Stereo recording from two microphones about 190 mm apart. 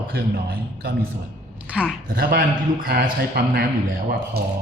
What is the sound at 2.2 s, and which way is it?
A man's voice, 50° right (ahead or behind).